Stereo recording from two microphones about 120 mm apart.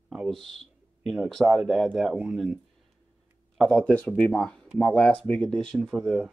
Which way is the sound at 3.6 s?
Centre (ahead or behind).